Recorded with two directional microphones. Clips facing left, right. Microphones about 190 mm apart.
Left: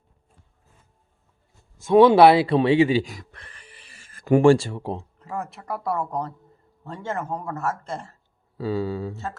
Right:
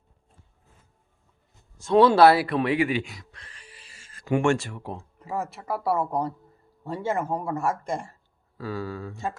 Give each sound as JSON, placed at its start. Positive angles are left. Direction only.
{"t": 1.8, "sound": "speech", "side_deg": 15}
{"t": 3.0, "sound": "a sound", "side_deg": 45}
{"t": 4.4, "sound": "speech", "side_deg": 30}
{"t": 5.2, "sound": "speech", "side_deg": -5}
{"t": 8.5, "sound": "speech", "side_deg": 25}
{"t": 9.1, "sound": "speech", "side_deg": -15}